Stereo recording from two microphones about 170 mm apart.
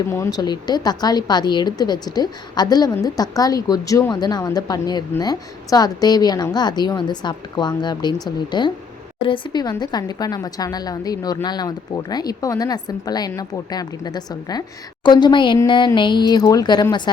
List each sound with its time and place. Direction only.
0.1 s a woman's voice: 20° left (ahead or behind)